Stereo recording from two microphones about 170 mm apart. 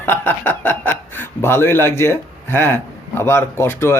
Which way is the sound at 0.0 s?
10° left (ahead or behind).